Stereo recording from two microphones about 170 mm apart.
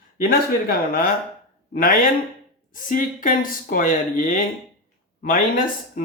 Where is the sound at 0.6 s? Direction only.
55° left (ahead or behind).